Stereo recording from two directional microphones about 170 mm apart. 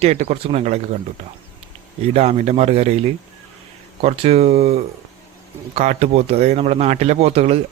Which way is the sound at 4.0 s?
40° right (ahead or behind).